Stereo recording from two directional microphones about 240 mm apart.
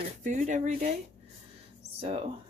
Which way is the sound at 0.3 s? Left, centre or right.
Right.